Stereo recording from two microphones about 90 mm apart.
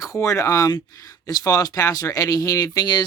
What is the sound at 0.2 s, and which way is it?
Speech, 35° left (ahead or behind).